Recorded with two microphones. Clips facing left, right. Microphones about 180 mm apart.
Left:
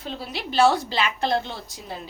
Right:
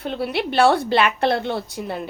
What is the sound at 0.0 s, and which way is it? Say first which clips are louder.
A woman's voice: right 9 dB; 60° right (ahead or behind).